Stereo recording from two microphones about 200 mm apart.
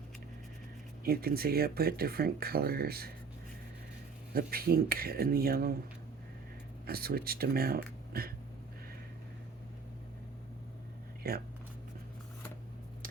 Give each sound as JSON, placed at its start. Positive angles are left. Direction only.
{"t": 1.0, "sound": "speech", "side_deg": -50}
{"t": 4.4, "sound": "speech", "side_deg": -50}
{"t": 6.8, "sound": "speech", "side_deg": -50}
{"t": 11.2, "sound": "speech", "side_deg": -50}